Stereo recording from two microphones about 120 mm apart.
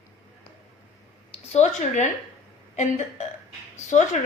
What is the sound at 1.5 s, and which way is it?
Speech, 75° left (ahead or behind).